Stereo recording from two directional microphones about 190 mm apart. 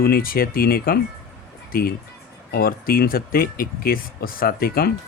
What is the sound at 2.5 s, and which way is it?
Mantra, 50° left (ahead or behind).